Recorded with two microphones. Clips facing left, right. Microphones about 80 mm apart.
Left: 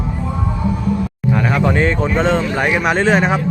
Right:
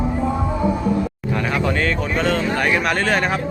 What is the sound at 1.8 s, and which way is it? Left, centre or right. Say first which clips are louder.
Speech: left 5 dB; left.